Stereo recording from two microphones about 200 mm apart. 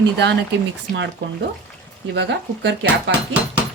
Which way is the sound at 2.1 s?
60° right (ahead or behind).